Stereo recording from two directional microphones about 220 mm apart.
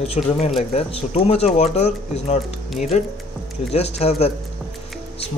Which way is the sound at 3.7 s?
30° left (ahead or behind).